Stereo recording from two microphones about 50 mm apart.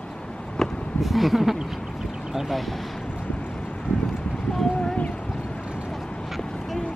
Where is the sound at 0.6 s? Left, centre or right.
Centre.